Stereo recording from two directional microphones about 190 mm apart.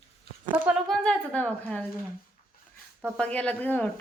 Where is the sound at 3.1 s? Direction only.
5° left (ahead or behind).